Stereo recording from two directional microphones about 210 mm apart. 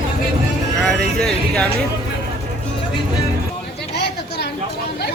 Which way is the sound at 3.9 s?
55° left (ahead or behind).